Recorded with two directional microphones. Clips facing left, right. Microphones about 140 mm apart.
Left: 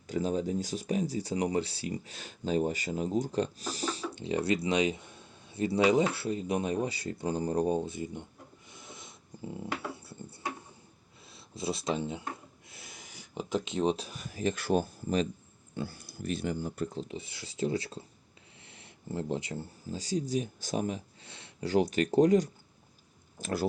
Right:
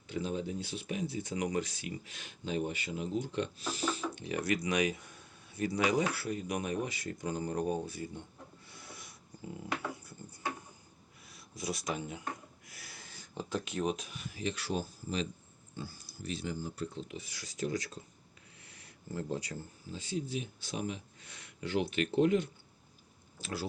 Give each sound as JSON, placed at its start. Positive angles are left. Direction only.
{"t": 0.1, "sound": "speech", "side_deg": 40}
{"t": 18.6, "sound": "a sound", "side_deg": 25}
{"t": 19.9, "sound": "speech", "side_deg": 40}
{"t": 21.2, "sound": "speech", "side_deg": 30}